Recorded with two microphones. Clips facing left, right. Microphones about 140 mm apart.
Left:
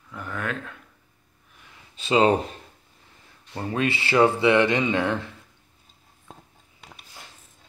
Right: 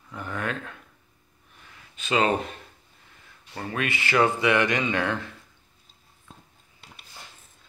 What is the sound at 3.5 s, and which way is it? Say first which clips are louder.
Speech: left 4 dB; 25° left (ahead or behind).